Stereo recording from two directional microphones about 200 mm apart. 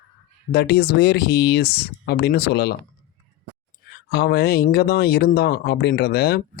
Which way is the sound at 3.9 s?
55° left (ahead or behind).